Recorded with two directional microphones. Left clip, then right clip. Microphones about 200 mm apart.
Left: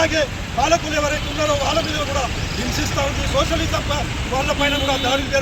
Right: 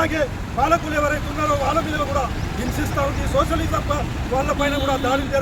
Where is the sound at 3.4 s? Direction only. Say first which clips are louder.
Even; 15° right (ahead or behind).